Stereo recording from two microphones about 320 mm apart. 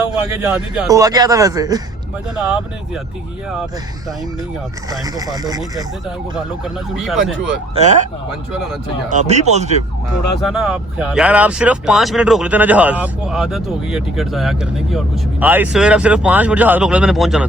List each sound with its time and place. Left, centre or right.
0.0 s a man's voice: centre
4.9 s a man's voice: centre
6.9 s speech: centre
7.8 s speech: right
9.0 s speech: right
10.4 s speech: centre